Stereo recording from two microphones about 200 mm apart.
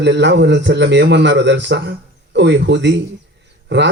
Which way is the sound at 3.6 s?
60° right (ahead or behind).